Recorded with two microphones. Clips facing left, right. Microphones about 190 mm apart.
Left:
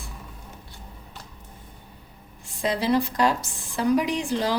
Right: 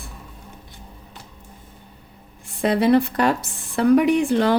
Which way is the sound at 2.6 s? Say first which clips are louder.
Right 6 dB; 60° right (ahead or behind).